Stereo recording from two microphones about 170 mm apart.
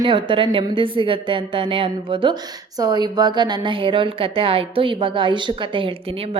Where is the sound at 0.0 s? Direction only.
30° right (ahead or behind).